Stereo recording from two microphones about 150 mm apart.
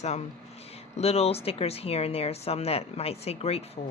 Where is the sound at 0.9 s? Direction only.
45° left (ahead or behind).